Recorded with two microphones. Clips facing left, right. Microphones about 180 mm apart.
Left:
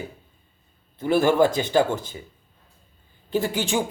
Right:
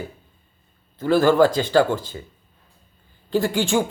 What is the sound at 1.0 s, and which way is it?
Speech, 25° left (ahead or behind).